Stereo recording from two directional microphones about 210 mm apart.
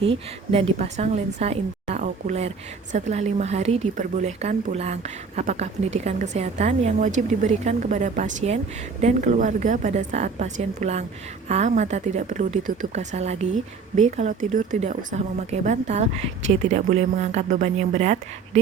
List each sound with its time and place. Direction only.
0.5 s a woman's voice: 30° right (ahead or behind)